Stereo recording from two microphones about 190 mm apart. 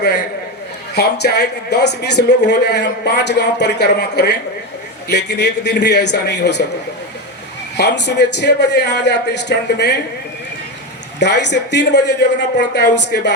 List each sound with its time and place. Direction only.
0.0 s speech: 60° left (ahead or behind)
7.8 s speech: 65° left (ahead or behind)
11.2 s speech: 65° left (ahead or behind)